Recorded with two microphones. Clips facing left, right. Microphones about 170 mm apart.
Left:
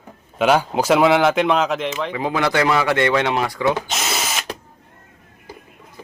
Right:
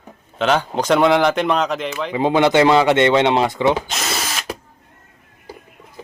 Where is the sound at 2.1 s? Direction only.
25° right (ahead or behind).